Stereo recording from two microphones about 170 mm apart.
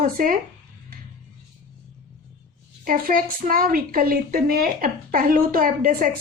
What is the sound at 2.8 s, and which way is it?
A woman's voice, 55° right (ahead or behind).